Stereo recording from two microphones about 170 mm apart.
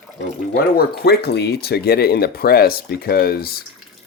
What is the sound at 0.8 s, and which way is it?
Speech, 70° left (ahead or behind).